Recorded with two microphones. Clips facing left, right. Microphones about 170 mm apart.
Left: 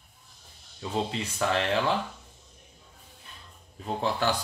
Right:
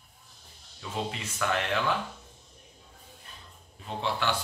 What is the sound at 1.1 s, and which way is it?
Speech, 30° left (ahead or behind).